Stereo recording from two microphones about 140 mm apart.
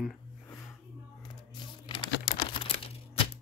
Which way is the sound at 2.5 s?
40° left (ahead or behind).